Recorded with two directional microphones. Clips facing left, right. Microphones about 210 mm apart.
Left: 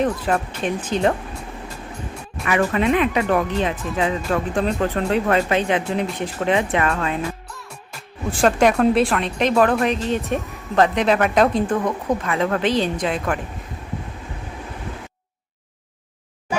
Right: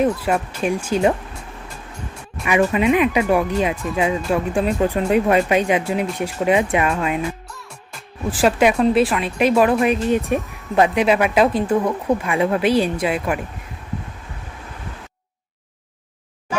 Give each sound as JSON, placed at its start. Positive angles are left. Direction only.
{"t": 0.0, "sound": "speech", "side_deg": -10}
{"t": 2.4, "sound": "speech", "side_deg": -15}
{"t": 7.5, "sound": "speech", "side_deg": 0}